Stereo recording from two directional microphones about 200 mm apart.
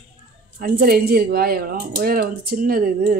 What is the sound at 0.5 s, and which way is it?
Music, 45° right (ahead or behind).